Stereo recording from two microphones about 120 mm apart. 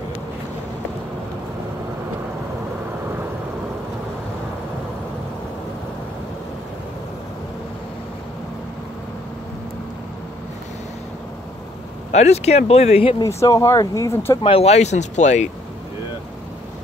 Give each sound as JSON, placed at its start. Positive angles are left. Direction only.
{"t": 12.1, "sound": "speech", "side_deg": 65}
{"t": 13.2, "sound": "speech", "side_deg": 25}
{"t": 14.4, "sound": "speech", "side_deg": 55}